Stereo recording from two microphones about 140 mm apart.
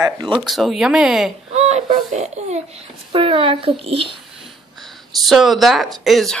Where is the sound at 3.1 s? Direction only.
40° right (ahead or behind).